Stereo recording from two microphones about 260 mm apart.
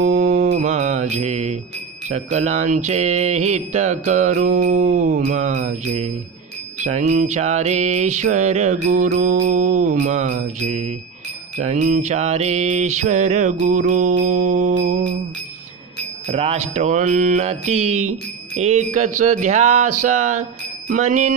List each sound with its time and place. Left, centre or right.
0.0 s music: right
2.0 s mantra: right
16.3 s mantra: right